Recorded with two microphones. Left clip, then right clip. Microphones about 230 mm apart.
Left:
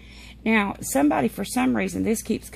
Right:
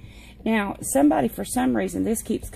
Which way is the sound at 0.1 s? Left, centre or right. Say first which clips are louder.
Left 3 dB; left.